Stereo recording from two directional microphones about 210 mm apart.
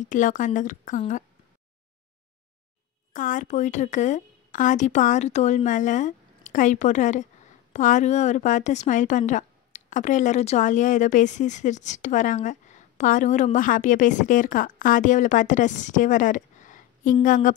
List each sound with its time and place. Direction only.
0.0 s a woman's voice: 40° left (ahead or behind)
3.1 s a woman's voice: 40° left (ahead or behind)